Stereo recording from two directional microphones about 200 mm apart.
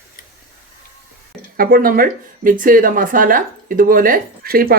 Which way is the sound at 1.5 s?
45° right (ahead or behind).